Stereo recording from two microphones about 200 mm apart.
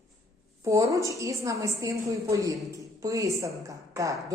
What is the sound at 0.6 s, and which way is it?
A woman's voice, 15° right (ahead or behind).